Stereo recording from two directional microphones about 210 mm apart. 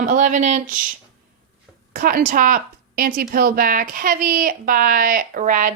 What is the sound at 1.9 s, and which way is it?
Speech, 45° right (ahead or behind).